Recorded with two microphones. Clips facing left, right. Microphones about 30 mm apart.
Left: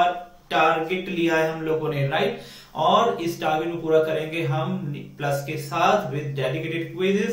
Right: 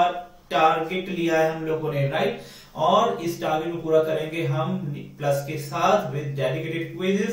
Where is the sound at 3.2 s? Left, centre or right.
Centre.